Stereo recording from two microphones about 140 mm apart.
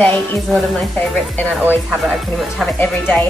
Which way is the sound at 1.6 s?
10° right (ahead or behind).